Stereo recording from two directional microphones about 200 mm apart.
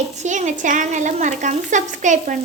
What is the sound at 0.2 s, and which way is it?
A woman's voice, 35° right (ahead or behind).